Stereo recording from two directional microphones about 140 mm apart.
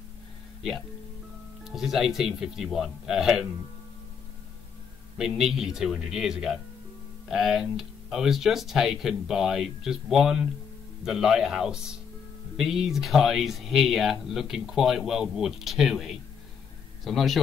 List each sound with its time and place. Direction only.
1.6 s speech: centre (ahead or behind)
5.1 s speech: centre (ahead or behind)